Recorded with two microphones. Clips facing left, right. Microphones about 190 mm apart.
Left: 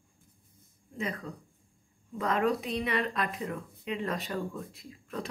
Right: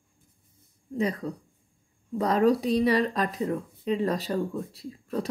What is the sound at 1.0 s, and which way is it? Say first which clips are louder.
Speech: right 8 dB; 35° right (ahead or behind).